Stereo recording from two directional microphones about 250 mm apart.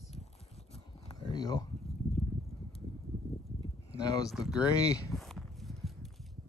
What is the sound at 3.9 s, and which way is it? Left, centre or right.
Speech, centre.